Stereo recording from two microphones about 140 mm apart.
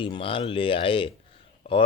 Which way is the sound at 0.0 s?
40° left (ahead or behind).